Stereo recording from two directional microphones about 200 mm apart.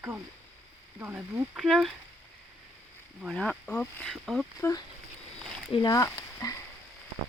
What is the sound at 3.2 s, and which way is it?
Speech, 5° left (ahead or behind).